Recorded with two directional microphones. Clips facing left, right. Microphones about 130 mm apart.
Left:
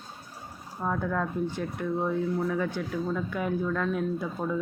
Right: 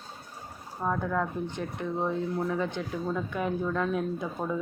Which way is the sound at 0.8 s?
5° right (ahead or behind).